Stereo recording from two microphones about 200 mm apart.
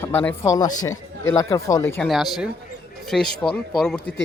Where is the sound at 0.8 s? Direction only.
90° left.